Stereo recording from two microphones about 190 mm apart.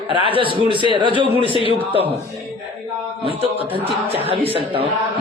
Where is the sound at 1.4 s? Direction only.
25° left (ahead or behind).